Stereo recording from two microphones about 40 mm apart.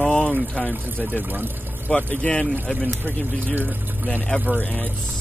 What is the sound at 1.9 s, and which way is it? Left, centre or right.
Speech, left.